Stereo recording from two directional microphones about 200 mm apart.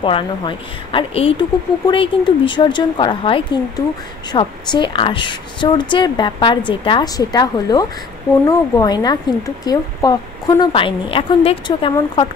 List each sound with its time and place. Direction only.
0.0 s a woman's voice: 25° left (ahead or behind)